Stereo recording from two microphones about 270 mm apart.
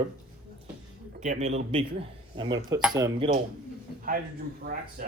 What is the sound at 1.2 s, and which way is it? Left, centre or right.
Speech, right.